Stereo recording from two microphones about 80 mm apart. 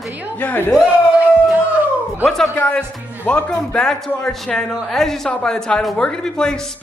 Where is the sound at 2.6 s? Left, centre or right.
Centre.